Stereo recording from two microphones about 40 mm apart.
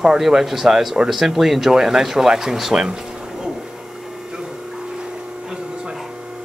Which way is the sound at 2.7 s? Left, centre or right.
Centre.